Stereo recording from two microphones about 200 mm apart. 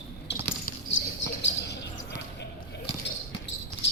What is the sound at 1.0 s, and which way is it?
Basketball bounce, 60° left (ahead or behind).